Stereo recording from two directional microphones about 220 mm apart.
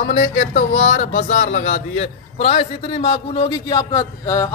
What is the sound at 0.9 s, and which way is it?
A man's voice, 35° left (ahead or behind).